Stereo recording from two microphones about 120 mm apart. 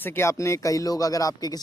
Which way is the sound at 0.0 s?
20° left (ahead or behind).